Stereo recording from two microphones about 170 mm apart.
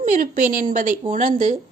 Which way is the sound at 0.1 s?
50° right (ahead or behind).